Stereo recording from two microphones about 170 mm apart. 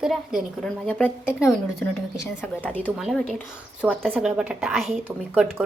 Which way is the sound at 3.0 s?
Centre (ahead or behind).